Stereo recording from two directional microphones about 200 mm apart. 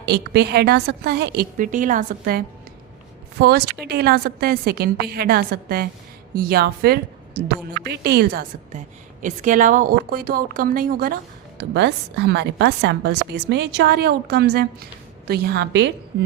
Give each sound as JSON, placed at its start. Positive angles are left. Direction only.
{"t": 0.0, "sound": "a woman's voice", "side_deg": -55}